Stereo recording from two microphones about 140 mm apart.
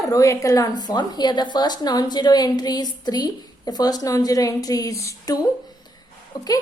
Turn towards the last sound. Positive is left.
turn(degrees=25)  # may be behind; listen again after turning